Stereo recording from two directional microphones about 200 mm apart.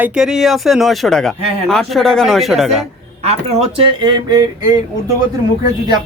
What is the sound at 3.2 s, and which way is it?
Speech, 30° right (ahead or behind).